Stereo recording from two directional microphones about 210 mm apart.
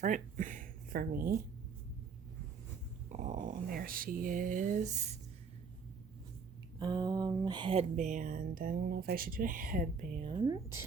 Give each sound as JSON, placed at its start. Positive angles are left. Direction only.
{"t": 0.0, "sound": "speech", "side_deg": -40}
{"t": 3.1, "sound": "speech", "side_deg": -35}
{"t": 6.7, "sound": "speech", "side_deg": -20}
{"t": 10.2, "sound": "speech", "side_deg": -20}